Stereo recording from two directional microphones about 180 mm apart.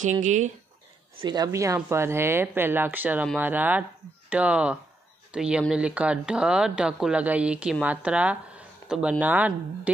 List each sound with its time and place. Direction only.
0.2 s speech: 40° right (ahead or behind)
1.2 s speech: 20° right (ahead or behind)